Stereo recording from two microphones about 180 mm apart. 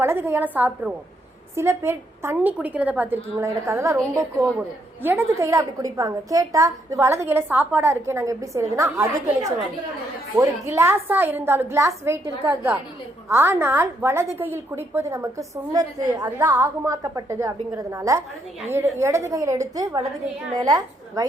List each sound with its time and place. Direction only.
0.0 s a woman's voice: 10° right (ahead or behind)